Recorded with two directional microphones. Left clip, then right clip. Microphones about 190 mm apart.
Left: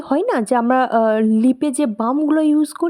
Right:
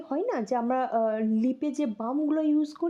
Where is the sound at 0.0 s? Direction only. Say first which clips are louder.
Left 11 dB; 30° left (ahead or behind).